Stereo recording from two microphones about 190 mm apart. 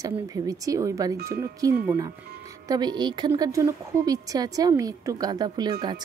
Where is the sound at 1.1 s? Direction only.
55° right (ahead or behind).